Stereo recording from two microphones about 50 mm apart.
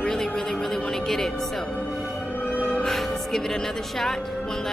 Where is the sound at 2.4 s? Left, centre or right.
Left.